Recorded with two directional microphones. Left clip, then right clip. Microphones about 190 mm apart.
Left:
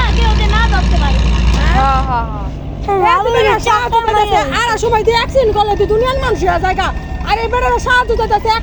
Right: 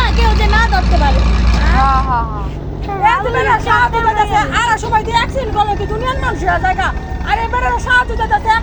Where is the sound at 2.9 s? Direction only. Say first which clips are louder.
Left 2 dB; 60° left (ahead or behind).